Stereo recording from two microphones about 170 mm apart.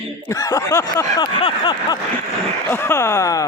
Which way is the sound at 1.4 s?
30° left (ahead or behind).